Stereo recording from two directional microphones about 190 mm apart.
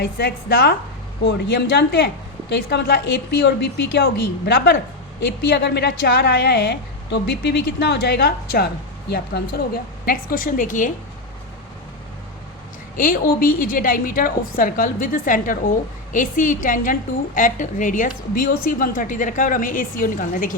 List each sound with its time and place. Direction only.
0.0 s a woman's voice: 55° left (ahead or behind)
5.2 s a woman's voice: 70° left (ahead or behind); by 10.9 s 45° left (ahead or behind)
13.0 s a woman's voice: 45° left (ahead or behind)